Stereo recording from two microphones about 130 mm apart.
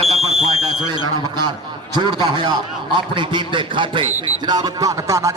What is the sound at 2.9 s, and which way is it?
A man's voice, 40° right (ahead or behind).